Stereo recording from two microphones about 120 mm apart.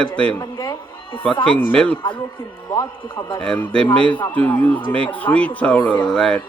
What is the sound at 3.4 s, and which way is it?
A man's voice, 10° left (ahead or behind).